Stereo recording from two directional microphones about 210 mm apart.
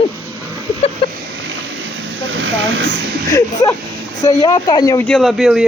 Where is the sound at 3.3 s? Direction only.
15° left (ahead or behind).